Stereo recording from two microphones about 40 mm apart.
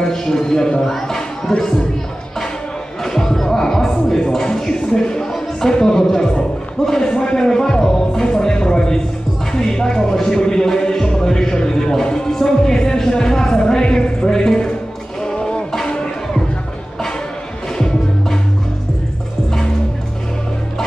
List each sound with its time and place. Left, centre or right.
0.0 s speech: centre
3.0 s music: centre
5.6 s speech: centre
15.2 s music: left
17.7 s music: centre